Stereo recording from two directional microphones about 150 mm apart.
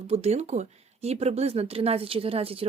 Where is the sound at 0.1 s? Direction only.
45° right (ahead or behind).